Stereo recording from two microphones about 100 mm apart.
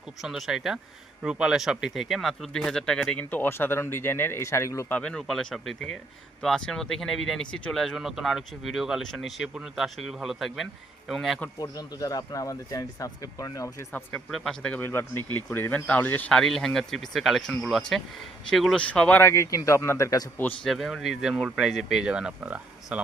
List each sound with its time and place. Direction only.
0.2 s speech: centre (ahead or behind)
3.2 s speech: 20° left (ahead or behind)
4.9 s speech: 10° left (ahead or behind)
11.6 s speech: 40° left (ahead or behind)
14.3 s speech: centre (ahead or behind)
14.7 s speech: 20° left (ahead or behind)
16.3 s speech: 5° left (ahead or behind)
18.9 s speech: 15° left (ahead or behind); by 20.2 s 35° left (ahead or behind)
20.7 s speech: centre (ahead or behind)